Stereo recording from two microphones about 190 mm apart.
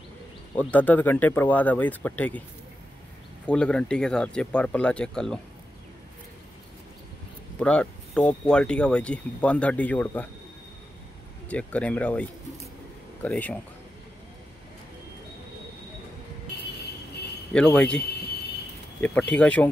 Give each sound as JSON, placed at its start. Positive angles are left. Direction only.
{"t": 0.6, "sound": "speech", "side_deg": 10}
{"t": 3.4, "sound": "speech", "side_deg": 5}
{"t": 7.5, "sound": "speech", "side_deg": 5}
{"t": 11.4, "sound": "speech", "side_deg": 5}
{"t": 16.5, "sound": "vehicle", "side_deg": 60}
{"t": 17.5, "sound": "speech", "side_deg": 5}